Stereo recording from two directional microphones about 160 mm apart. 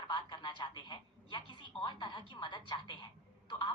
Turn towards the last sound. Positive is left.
turn(degrees=30)  # may be behind; listen again after turning